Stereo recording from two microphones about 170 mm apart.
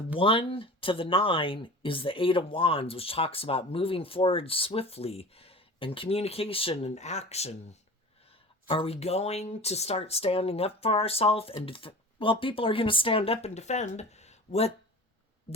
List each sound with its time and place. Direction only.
0.2 s speech: 30° left (ahead or behind)